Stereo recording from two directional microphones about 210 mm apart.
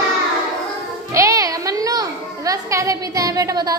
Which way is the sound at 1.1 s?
15° right (ahead or behind).